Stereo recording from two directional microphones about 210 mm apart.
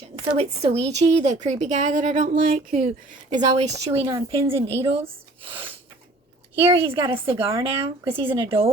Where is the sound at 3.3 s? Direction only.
30° right (ahead or behind).